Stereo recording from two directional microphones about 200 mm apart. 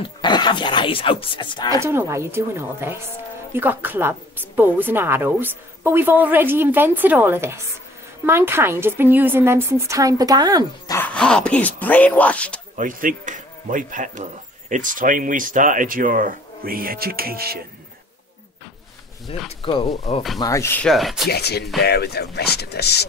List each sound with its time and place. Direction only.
0.0 s speech: 20° left (ahead or behind)
1.9 s a woman's voice: 15° right (ahead or behind)
11.1 s speech: 5° left (ahead or behind)
12.7 s speech: 40° right (ahead or behind)
19.3 s speech: 25° left (ahead or behind); by 21.3 s centre (ahead or behind)
21.3 s speech: 55° left (ahead or behind)